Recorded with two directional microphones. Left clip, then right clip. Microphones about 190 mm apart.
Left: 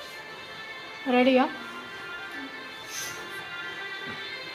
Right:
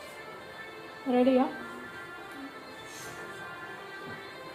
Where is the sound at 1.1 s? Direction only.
20° left (ahead or behind).